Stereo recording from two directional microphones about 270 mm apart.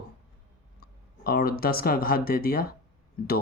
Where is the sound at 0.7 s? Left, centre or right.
Left.